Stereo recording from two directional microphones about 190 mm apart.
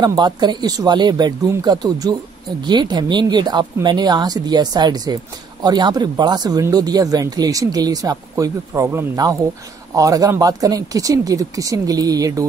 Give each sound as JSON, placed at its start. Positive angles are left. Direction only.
{"t": 0.0, "sound": "speech", "side_deg": -20}